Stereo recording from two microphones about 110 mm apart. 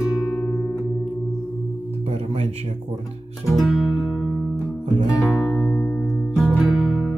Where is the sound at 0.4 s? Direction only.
15° left (ahead or behind).